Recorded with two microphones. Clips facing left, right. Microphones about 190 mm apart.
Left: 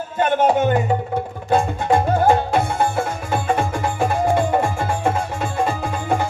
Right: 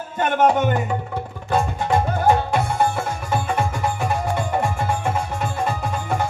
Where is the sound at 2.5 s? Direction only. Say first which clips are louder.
Left 1 dB; 55° left (ahead or behind).